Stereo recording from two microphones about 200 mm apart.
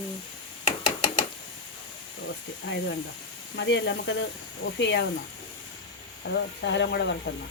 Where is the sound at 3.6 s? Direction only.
60° left (ahead or behind).